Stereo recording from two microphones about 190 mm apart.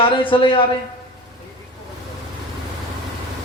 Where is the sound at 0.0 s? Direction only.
25° left (ahead or behind).